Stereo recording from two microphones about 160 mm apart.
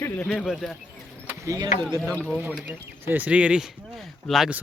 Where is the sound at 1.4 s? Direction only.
25° right (ahead or behind).